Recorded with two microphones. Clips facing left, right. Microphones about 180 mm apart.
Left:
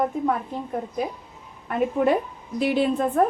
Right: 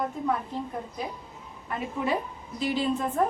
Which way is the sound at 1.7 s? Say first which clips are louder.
Left 8 dB; 60° left (ahead or behind).